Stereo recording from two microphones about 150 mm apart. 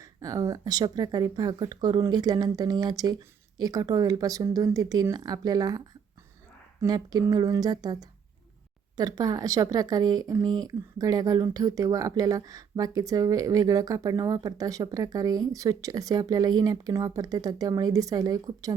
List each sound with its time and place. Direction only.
0.0 s speech: 25° right (ahead or behind)
6.8 s speech: 25° right (ahead or behind)
9.0 s speech: 25° right (ahead or behind)